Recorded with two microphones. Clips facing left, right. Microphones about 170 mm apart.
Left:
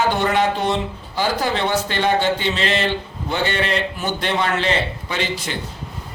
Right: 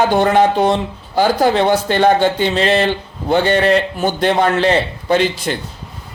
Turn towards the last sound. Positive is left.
turn(degrees=-45)  # may be behind; listen again after turning